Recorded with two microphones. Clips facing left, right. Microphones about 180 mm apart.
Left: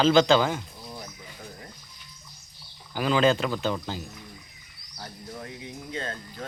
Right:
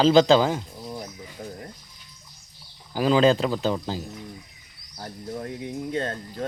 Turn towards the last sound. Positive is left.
turn(degrees=-40)  # may be behind; listen again after turning